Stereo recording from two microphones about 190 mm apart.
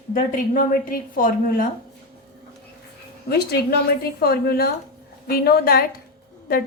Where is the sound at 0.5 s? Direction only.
45° left (ahead or behind).